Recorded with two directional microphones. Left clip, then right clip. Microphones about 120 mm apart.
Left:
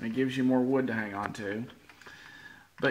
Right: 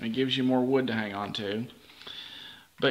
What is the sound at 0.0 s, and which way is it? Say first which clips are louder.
Speech: right 2 dB; 10° right (ahead or behind).